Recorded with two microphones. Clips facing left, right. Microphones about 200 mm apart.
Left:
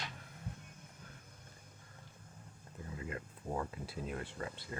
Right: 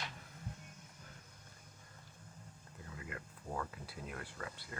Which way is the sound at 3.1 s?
25° left (ahead or behind).